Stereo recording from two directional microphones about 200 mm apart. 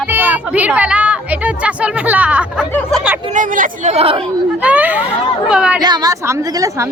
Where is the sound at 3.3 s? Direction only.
40° right (ahead or behind).